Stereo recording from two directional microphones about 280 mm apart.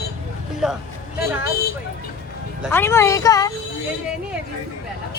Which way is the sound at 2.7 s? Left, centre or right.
Centre.